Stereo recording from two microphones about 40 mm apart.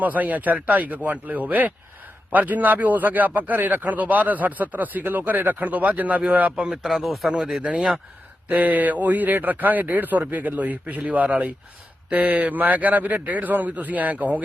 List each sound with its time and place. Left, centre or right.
0.0 s a man's voice: right
6.8 s speech: centre
7.3 s speech: centre
7.6 s speech: right
8.4 s a man's voice: right